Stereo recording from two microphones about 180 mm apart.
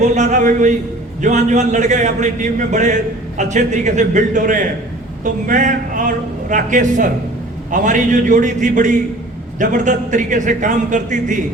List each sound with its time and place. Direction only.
0.0 s a man's voice: 40° right (ahead or behind)